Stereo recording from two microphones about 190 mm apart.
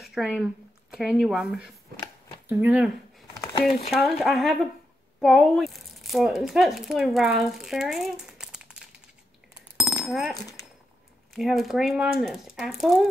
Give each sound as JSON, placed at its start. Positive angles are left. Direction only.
{"t": 0.0, "sound": "speech", "side_deg": 0}
{"t": 3.6, "sound": "speech", "side_deg": 35}
{"t": 4.0, "sound": "speech", "side_deg": 0}
{"t": 10.0, "sound": "speech", "side_deg": 0}
{"t": 10.3, "sound": "speech", "side_deg": 15}
{"t": 11.3, "sound": "speech", "side_deg": 0}